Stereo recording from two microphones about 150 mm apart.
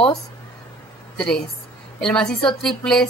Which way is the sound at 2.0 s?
5° left (ahead or behind).